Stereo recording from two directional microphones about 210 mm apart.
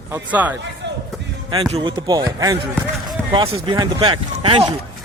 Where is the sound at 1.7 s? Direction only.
20° right (ahead or behind).